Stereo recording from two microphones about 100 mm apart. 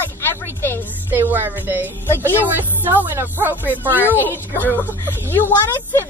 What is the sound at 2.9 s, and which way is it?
Speech, 20° right (ahead or behind).